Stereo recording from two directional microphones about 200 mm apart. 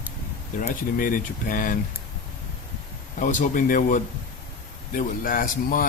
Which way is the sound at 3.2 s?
40° left (ahead or behind).